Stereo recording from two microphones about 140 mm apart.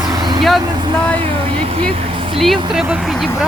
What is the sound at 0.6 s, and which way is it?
Speech, 30° right (ahead or behind).